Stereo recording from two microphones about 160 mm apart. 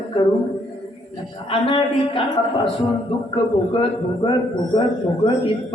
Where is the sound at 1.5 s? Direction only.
30° left (ahead or behind).